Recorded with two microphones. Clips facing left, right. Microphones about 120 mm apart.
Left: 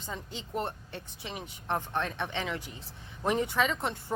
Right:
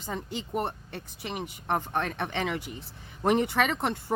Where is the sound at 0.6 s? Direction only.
65° right (ahead or behind).